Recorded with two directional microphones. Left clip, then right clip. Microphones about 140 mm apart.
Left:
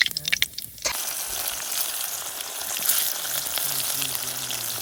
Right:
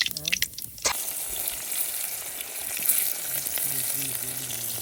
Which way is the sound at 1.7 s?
40° left (ahead or behind).